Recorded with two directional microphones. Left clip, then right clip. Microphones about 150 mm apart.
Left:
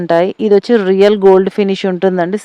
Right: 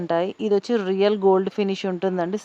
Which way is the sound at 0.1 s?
45° left (ahead or behind).